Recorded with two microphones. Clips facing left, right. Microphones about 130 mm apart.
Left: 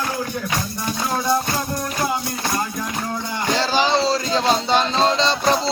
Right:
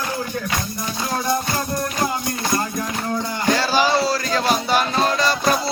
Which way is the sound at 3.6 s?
20° left (ahead or behind).